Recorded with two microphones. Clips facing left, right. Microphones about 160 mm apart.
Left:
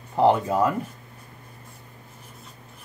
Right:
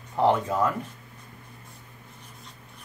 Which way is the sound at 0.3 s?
30° left (ahead or behind).